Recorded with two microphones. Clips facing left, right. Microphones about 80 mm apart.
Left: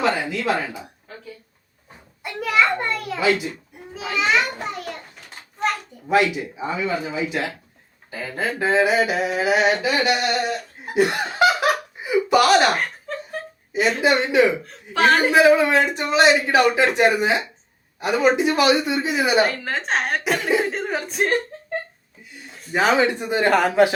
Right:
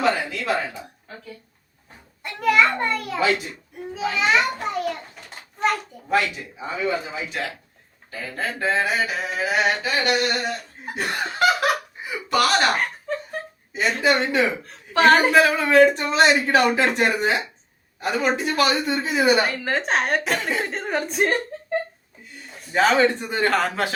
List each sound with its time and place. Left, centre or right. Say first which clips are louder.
0.0 s speech: left 1 dB; centre
2.2 s a woman's voice: right 1 dB; centre
8.1 s speech: left 3 dB; centre
11.4 s laughter: left 1 dB; centre
12.5 s laughter: left 3 dB; centre
13.7 s a woman's voice: left 2 dB; centre
15.3 s a woman's voice: left 2 dB; centre
22.4 s a sound: even; centre
22.7 s speech: even; centre